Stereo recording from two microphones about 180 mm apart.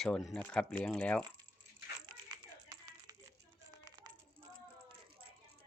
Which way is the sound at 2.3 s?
20° right (ahead or behind).